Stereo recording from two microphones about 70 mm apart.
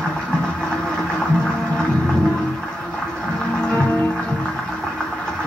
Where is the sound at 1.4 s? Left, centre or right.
Centre.